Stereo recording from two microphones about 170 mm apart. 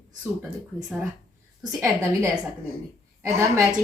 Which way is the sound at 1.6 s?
15° right (ahead or behind).